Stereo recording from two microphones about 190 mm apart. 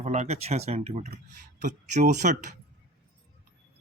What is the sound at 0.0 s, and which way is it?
Speech, 35° right (ahead or behind).